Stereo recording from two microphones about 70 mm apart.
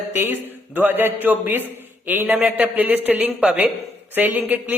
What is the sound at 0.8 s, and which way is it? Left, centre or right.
A man's voice, right.